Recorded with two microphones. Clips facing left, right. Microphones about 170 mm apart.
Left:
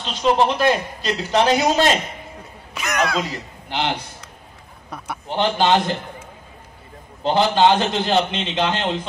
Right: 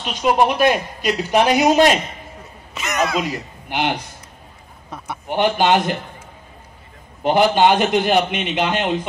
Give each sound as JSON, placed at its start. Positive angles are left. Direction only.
{"t": 0.0, "sound": "a man's voice", "side_deg": -15}
{"t": 2.7, "sound": "a sound", "side_deg": 0}
{"t": 3.2, "sound": "a man's voice", "side_deg": -15}
{"t": 4.9, "sound": "a sound", "side_deg": 0}
{"t": 5.3, "sound": "a man's voice", "side_deg": -15}
{"t": 7.2, "sound": "a man's voice", "side_deg": -15}